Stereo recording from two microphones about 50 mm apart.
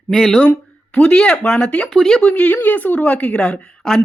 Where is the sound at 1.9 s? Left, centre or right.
Centre.